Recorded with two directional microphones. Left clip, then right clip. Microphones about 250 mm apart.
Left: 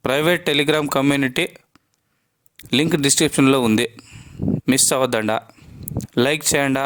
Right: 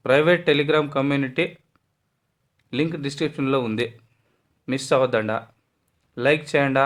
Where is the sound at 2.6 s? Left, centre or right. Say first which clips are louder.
Left 7 dB; left.